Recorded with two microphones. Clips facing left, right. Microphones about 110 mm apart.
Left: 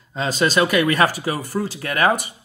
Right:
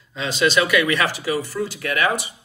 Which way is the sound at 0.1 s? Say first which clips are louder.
Even; 40° left (ahead or behind).